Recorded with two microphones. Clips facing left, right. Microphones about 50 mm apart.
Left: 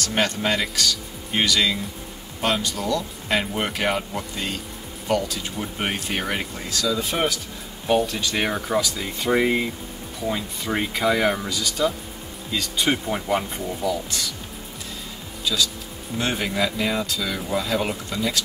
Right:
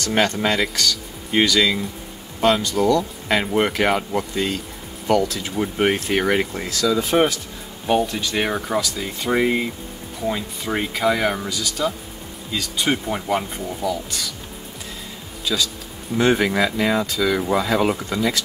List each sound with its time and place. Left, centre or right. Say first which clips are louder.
0.4 s speech: right 3 dB; centre
5.6 s speech: right 9 dB; centre
7.8 s speech: right 1 dB; centre
16.2 s speech: right 6 dB; right